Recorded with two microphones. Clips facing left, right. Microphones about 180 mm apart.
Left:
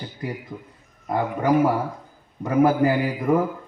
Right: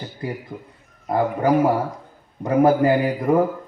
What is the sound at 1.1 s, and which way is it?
A man's voice, 30° right (ahead or behind).